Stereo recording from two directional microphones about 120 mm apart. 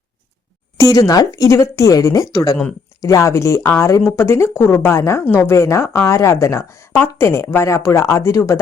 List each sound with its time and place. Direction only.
0.8 s a woman's voice: 30° left (ahead or behind)